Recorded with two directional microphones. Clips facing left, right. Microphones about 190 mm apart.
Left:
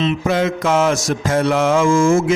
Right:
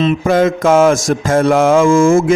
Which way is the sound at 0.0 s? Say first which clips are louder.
Right 5 dB; 50° right (ahead or behind).